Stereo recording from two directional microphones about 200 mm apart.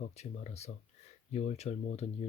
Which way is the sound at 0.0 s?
35° left (ahead or behind).